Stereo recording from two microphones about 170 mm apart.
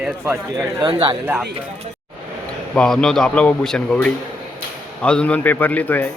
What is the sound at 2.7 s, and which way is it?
A man's voice, 5° left (ahead or behind).